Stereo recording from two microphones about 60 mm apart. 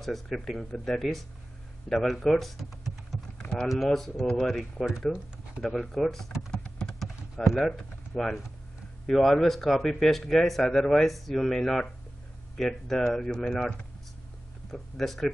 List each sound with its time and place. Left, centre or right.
0.0 s speech: centre
6.5 s typing: centre
9.0 s speech: centre